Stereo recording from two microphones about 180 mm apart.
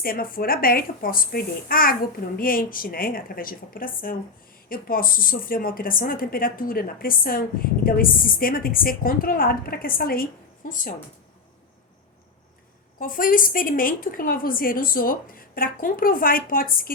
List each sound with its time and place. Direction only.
0.0 s a woman's voice: 55° left (ahead or behind)
13.0 s a woman's voice: 50° left (ahead or behind)